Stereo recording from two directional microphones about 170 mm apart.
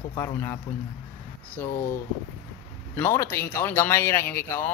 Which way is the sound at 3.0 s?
15° left (ahead or behind).